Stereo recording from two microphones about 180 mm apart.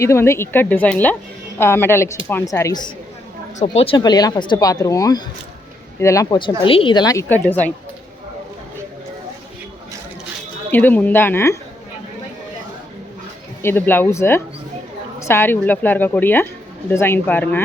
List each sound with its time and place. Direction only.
0.0 s a woman's voice: 15° left (ahead or behind)
3.6 s a woman's voice: 35° left (ahead or behind); by 7.7 s 10° left (ahead or behind)
10.7 s a woman's voice: 10° left (ahead or behind)
13.6 s a woman's voice: 10° left (ahead or behind)